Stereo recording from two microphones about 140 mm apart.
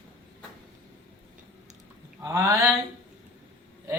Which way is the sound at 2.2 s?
20° right (ahead or behind).